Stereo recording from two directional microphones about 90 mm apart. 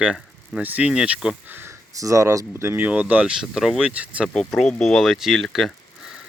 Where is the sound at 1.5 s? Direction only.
20° right (ahead or behind).